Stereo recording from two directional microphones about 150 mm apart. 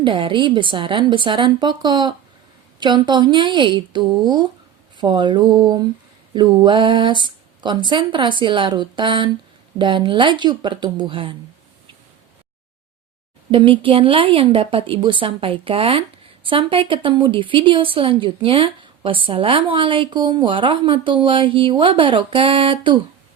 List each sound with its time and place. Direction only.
0.0 s a woman's voice: 35° right (ahead or behind)
4.9 s mantra: 30° right (ahead or behind)
6.3 s a woman's voice: 30° right (ahead or behind)
13.5 s a woman's voice: 35° right (ahead or behind)